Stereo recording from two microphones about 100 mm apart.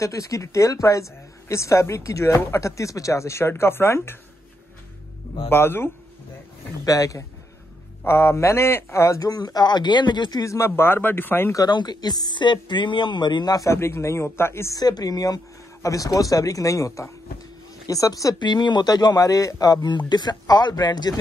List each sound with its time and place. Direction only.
0.0 s speech: 30° left (ahead or behind)
5.5 s speech: 25° left (ahead or behind)
6.8 s a man's voice: 35° left (ahead or behind)
10.4 s speech: 30° left (ahead or behind)
11.5 s speech: 45° left (ahead or behind)
13.7 s speech: 25° left (ahead or behind)
14.8 s a man's voice: 40° left (ahead or behind)
18.4 s speech: 50° left (ahead or behind)